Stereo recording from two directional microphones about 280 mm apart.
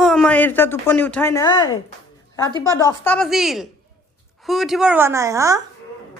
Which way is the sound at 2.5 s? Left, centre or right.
Centre.